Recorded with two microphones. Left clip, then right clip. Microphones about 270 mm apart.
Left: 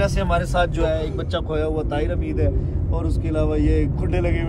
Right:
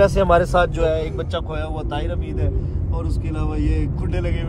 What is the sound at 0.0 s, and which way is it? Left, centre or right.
Speech, centre.